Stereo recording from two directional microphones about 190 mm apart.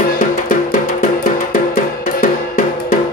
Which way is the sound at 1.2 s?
50° left (ahead or behind).